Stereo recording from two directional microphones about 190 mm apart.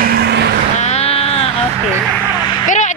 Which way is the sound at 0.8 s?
35° left (ahead or behind).